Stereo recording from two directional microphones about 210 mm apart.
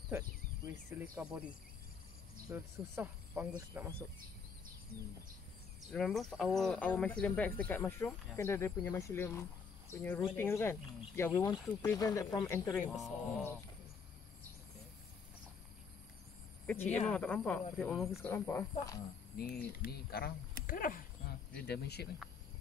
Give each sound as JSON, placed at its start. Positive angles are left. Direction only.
{"t": 0.9, "sound": "speech", "side_deg": -10}
{"t": 2.5, "sound": "speech", "side_deg": -10}
{"t": 5.9, "sound": "speech", "side_deg": 0}
{"t": 12.9, "sound": "speech", "side_deg": 0}
{"t": 16.6, "sound": "speech", "side_deg": 10}
{"t": 19.3, "sound": "speech", "side_deg": 45}